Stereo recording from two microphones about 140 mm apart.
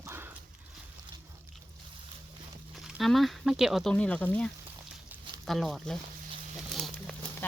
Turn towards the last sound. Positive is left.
turn(degrees=0)  # may be behind; listen again after turning